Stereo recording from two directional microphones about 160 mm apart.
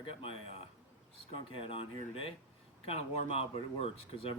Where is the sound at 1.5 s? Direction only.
35° left (ahead or behind).